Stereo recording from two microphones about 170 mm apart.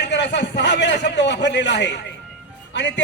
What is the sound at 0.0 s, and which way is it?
A man's voice, 90° left.